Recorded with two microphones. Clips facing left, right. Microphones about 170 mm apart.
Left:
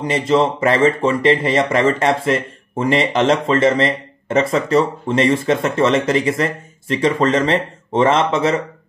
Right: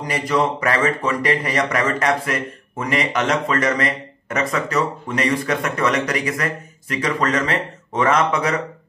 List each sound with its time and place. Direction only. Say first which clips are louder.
0.0 s speech: left 4 dB; 25° left (ahead or behind)